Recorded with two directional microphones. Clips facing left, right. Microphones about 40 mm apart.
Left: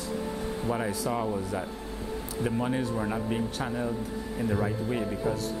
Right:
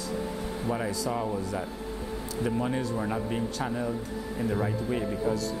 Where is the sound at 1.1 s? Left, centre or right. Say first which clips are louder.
Left 1 dB; centre.